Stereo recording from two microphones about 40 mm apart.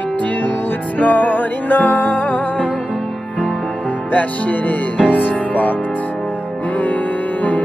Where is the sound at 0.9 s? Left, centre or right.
Left.